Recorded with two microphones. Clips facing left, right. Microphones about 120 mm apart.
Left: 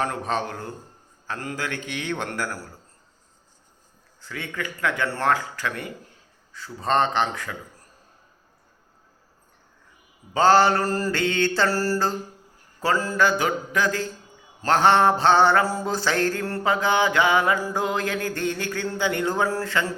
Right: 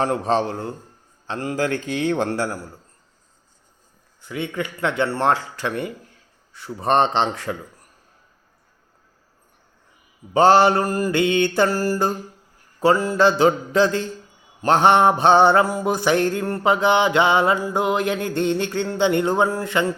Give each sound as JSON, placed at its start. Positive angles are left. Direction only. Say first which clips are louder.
{"t": 0.0, "sound": "mantra", "louder": "right 6 dB", "side_deg": -30}
{"t": 1.3, "sound": "a man's voice", "louder": "right 7 dB", "side_deg": -30}
{"t": 4.2, "sound": "mantra", "louder": "right 6 dB", "side_deg": -20}
{"t": 10.3, "sound": "mantra", "louder": "right 3 dB", "side_deg": -20}